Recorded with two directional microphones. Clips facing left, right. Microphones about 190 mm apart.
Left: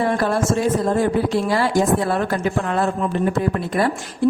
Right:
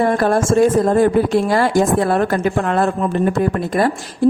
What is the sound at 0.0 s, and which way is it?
A woman's voice, 50° right (ahead or behind).